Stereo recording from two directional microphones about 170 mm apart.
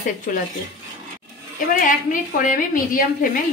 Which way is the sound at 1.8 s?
50° left (ahead or behind).